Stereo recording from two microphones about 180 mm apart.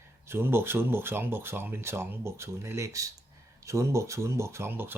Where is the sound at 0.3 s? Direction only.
15° right (ahead or behind).